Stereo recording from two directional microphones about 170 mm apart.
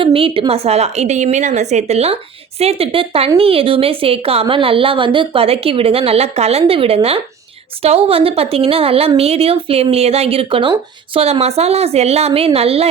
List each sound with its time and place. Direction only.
0.0 s a woman's voice: 30° right (ahead or behind)